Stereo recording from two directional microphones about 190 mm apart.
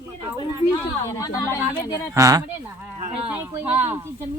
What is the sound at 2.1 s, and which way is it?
Speech, 15° right (ahead or behind).